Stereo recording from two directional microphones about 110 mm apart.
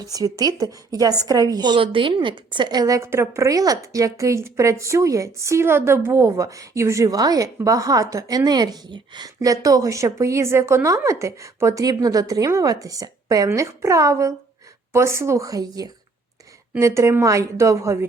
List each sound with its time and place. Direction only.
0.0 s a woman's voice: 35° right (ahead or behind)